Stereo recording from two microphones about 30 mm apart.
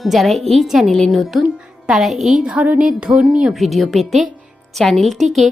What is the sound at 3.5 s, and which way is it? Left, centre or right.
Speech, centre.